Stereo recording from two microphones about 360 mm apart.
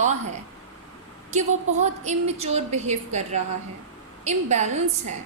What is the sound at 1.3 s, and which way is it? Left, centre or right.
A woman's voice, centre.